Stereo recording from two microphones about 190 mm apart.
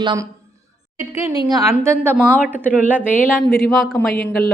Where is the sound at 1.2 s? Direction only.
25° left (ahead or behind).